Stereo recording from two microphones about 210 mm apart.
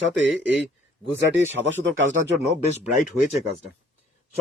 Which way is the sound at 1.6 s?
60° right (ahead or behind).